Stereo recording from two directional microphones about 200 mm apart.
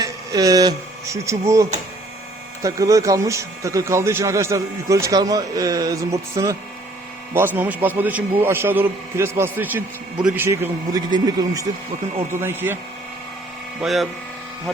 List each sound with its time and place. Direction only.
0.0 s speech: 20° right (ahead or behind)
13.8 s speech: centre (ahead or behind)